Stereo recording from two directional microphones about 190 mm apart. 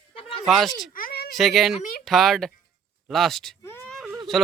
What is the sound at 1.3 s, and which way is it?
Speech, centre (ahead or behind).